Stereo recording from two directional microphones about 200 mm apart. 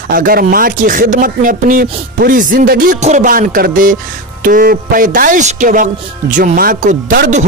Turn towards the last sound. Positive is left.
turn(degrees=-45)  # may be behind; listen again after turning